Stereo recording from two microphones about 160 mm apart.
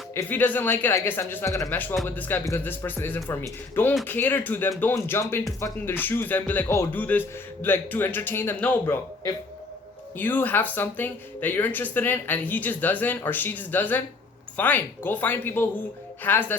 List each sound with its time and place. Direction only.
0.1 s speech: 15° left (ahead or behind)
10.2 s speech: 10° left (ahead or behind)